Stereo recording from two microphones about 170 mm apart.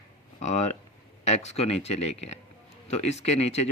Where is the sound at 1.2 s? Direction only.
40° left (ahead or behind).